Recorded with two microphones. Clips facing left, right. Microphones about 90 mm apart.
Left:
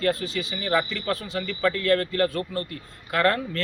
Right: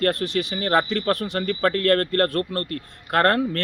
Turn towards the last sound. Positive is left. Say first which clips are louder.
# right 4 dB
turn(degrees=-55)  # may be behind; listen again after turning